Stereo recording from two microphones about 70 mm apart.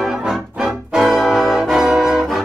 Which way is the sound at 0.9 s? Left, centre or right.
Centre.